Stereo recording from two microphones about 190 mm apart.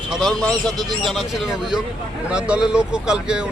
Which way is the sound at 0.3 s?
5° left (ahead or behind).